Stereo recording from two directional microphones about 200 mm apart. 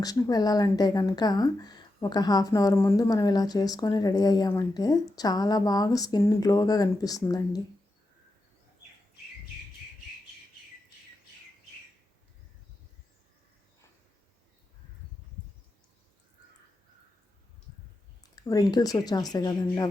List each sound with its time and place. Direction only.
0.0 s speech: 20° left (ahead or behind)
18.3 s speech: 20° left (ahead or behind)